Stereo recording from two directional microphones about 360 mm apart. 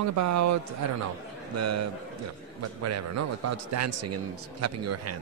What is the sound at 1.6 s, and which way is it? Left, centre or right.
A man's voice, right.